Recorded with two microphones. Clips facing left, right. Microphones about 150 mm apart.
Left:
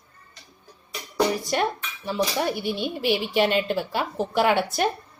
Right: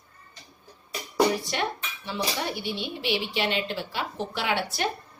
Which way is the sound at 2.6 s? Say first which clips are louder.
Left 5 dB; 45° left (ahead or behind).